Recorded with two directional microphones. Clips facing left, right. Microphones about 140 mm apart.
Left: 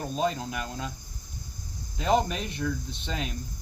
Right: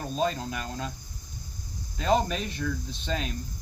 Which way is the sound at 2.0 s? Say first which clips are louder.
Even; 15° left (ahead or behind).